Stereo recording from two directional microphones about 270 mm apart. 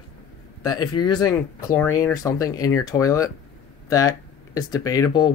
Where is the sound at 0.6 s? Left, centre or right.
Centre.